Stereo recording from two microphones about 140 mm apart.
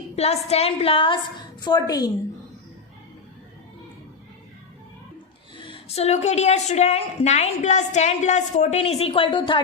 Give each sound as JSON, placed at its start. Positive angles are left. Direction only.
{"t": 0.2, "sound": "a woman's voice", "side_deg": 50}
{"t": 5.5, "sound": "a woman's voice", "side_deg": 35}